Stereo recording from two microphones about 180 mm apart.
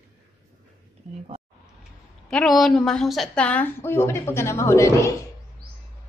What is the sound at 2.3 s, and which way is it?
A woman's voice, centre (ahead or behind).